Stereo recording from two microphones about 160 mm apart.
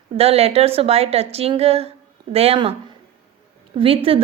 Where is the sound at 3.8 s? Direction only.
35° right (ahead or behind).